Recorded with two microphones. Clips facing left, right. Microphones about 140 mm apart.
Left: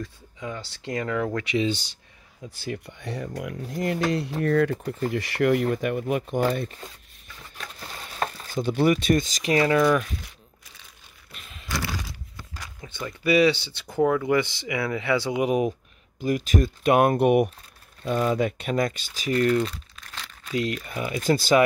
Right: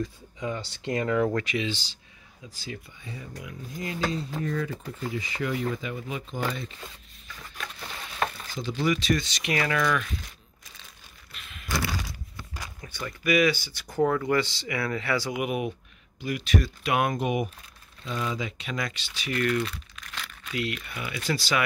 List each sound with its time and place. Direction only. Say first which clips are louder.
0.0 s speech: right 3 dB; centre (ahead or behind)
2.5 s speech: left 6 dB; 60° left (ahead or behind)
7.5 s a sound: even; 35° left (ahead or behind)
8.5 s speech: left 6 dB; 55° left (ahead or behind); by 10.0 s 30° left (ahead or behind)
12.8 s speech: left 3 dB; 20° left (ahead or behind)
14.0 s speech: left 3 dB; 5° left (ahead or behind)
14.3 s speech: left 3 dB; 20° left (ahead or behind); by 15.7 s 35° left (ahead or behind)
16.2 s speech: left 4 dB; 45° left (ahead or behind)
17.2 s speech: left 8 dB; 60° left (ahead or behind)